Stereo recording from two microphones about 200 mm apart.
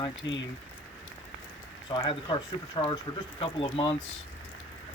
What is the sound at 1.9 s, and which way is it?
Speech, 25° left (ahead or behind).